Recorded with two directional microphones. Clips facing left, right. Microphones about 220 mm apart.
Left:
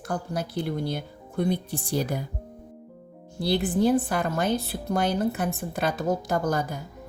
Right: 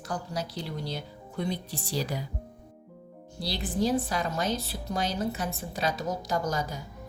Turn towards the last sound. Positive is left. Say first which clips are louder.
# left 4 dB
turn(degrees=55)  # may be behind; listen again after turning